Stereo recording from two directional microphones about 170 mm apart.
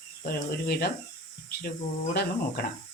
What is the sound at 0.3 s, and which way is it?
Speech, 65° left (ahead or behind).